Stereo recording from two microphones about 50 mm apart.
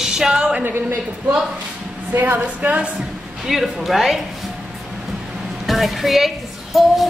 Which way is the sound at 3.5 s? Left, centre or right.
Centre.